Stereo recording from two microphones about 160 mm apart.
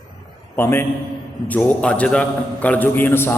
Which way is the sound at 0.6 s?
15° left (ahead or behind).